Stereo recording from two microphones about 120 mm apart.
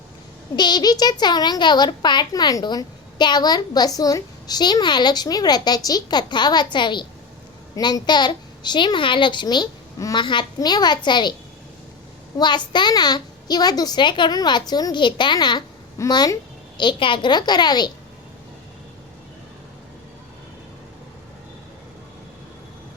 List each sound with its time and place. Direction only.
0.5 s speech: 35° left (ahead or behind)
12.4 s speech: 40° left (ahead or behind)